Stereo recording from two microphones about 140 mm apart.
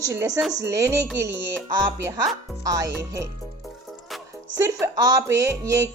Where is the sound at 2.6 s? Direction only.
25° right (ahead or behind).